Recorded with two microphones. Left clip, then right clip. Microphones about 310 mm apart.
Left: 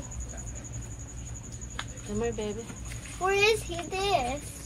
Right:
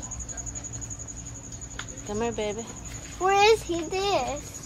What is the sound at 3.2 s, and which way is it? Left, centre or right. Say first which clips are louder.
A child's voice: right 5 dB; right.